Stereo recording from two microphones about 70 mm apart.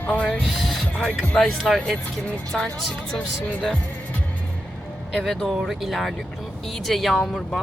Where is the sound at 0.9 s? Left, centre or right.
Centre.